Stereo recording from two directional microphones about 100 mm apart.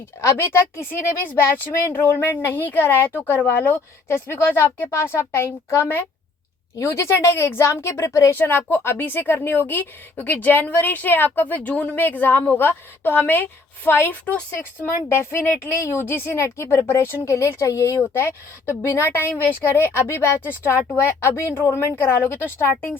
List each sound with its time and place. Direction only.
0.2 s a woman's voice: 25° left (ahead or behind)
8.4 s a woman's voice: 20° left (ahead or behind)
15.1 s a woman's voice: 25° left (ahead or behind)